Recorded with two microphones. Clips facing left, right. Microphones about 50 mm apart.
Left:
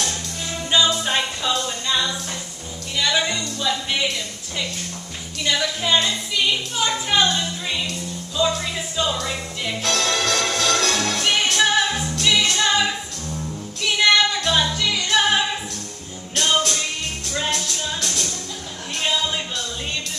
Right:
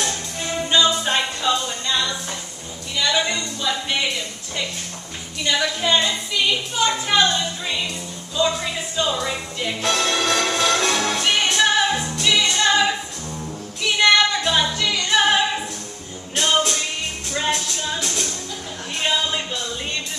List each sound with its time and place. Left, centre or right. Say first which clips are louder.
0.0 s music: right 2 dB; centre
0.8 s music: right 1 dB; centre
3.3 s music: even; centre
5.4 s music: right 1 dB; centre
6.8 s a sound: right 2 dB; centre
7.2 s music: right 1 dB; centre
13.9 s music: right 1 dB; centre
18.0 s music: right 1 dB; centre
18.9 s music: right 1 dB; centre